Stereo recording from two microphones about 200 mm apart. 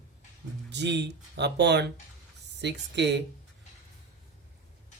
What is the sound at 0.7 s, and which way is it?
Speech, 60° right (ahead or behind).